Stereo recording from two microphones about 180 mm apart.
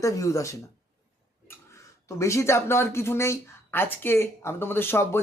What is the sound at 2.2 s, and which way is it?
Speech, 15° left (ahead or behind).